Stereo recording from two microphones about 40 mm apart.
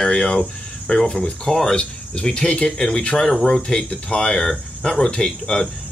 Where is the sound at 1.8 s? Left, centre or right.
Left.